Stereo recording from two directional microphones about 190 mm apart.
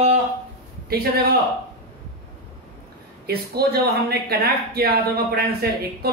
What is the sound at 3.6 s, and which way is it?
Speech, 55° right (ahead or behind).